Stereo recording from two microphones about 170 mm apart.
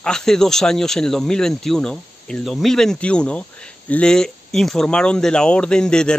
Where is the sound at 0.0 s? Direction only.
5° left (ahead or behind).